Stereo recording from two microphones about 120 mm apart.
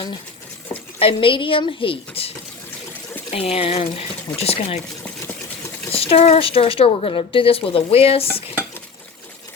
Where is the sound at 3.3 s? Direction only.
55° left (ahead or behind).